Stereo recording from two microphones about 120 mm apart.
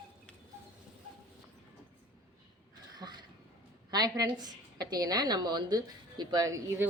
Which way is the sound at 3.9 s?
35° right (ahead or behind).